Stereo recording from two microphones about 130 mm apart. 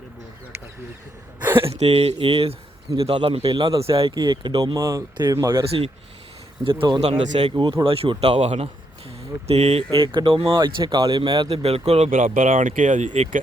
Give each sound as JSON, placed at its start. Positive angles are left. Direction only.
{"t": 1.7, "sound": "speech", "side_deg": -55}
{"t": 3.4, "sound": "speech", "side_deg": -30}
{"t": 3.8, "sound": "speech", "side_deg": -45}
{"t": 4.1, "sound": "speech", "side_deg": -30}
{"t": 5.6, "sound": "speech", "side_deg": -50}
{"t": 7.0, "sound": "speech", "side_deg": -55}
{"t": 7.4, "sound": "speech", "side_deg": -40}
{"t": 9.9, "sound": "speech", "side_deg": -40}